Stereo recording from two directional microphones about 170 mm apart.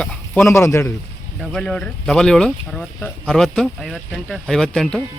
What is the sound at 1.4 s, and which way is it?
Speech, 5° left (ahead or behind).